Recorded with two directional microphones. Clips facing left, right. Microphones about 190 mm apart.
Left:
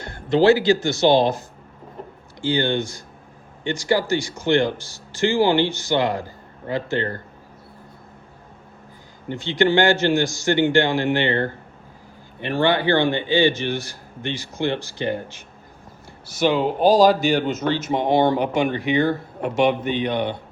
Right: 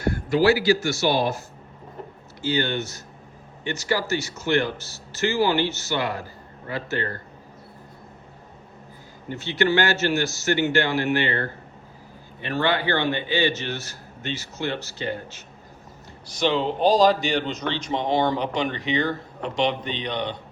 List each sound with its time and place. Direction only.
0.1 s speech: 20° left (ahead or behind)
2.6 s a man's voice: 15° left (ahead or behind)
3.8 s a man's voice: 15° left (ahead or behind)
9.6 s a man's voice: 15° left (ahead or behind)
16.2 s a man's voice: 5° left (ahead or behind)